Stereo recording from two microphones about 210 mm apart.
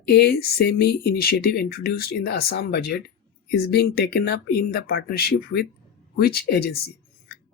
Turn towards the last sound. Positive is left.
turn(degrees=50)  # may be behind; listen again after turning